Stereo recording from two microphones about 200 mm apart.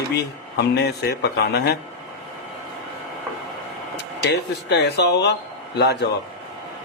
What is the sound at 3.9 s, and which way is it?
A man's voice, 60° left (ahead or behind).